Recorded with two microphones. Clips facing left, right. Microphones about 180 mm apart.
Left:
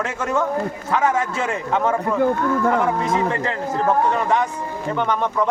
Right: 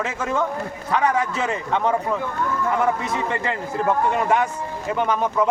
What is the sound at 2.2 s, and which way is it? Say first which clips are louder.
Speech: left 7 dB; 60° left (ahead or behind).